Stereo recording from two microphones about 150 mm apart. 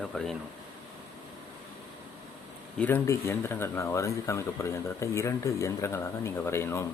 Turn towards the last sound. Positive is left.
turn(degrees=20)  # may be behind; listen again after turning